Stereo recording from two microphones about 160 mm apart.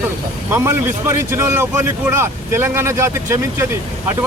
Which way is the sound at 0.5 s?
15° right (ahead or behind).